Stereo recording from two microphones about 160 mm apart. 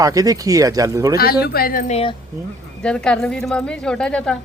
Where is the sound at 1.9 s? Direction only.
40° left (ahead or behind).